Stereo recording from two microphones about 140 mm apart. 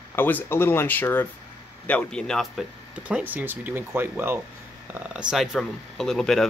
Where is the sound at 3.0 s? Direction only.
10° right (ahead or behind).